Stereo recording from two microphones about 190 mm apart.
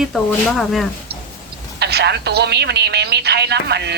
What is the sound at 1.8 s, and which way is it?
Speech, 60° right (ahead or behind).